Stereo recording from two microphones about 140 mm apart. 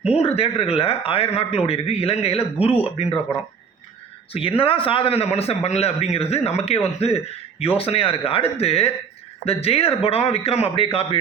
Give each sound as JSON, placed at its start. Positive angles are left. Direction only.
{"t": 0.2, "sound": "a man's voice", "side_deg": 45}
{"t": 4.3, "sound": "a man's voice", "side_deg": 40}